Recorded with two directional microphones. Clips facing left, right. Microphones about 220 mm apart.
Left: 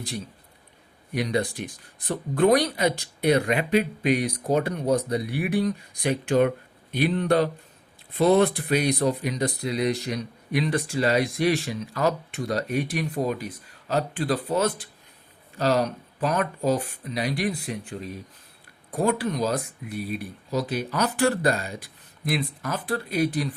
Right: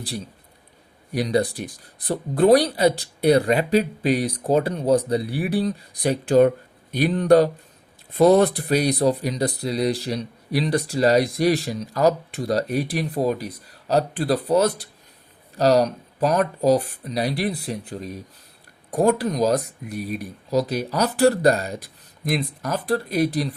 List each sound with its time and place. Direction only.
1.1 s speech: 35° right (ahead or behind)